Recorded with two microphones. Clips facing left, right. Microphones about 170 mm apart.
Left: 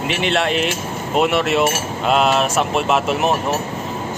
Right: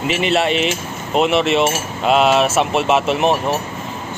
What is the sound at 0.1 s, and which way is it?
Speech, centre (ahead or behind).